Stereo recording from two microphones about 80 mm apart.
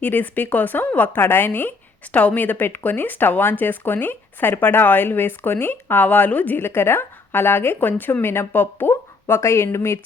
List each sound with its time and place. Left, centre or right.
0.0 s speech: left